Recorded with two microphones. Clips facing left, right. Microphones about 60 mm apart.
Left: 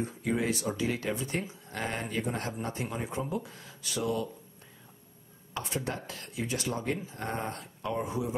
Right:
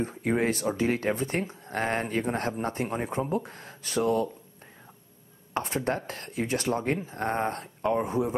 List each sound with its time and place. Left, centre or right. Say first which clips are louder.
0.0 s speech: right 4 dB; right
5.5 s a sound: right 6 dB; right
5.9 s speech: right 7 dB; right